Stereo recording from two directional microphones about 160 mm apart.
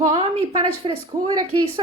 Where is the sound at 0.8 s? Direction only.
30° right (ahead or behind).